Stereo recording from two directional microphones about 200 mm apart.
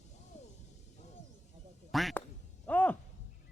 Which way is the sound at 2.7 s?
5° left (ahead or behind).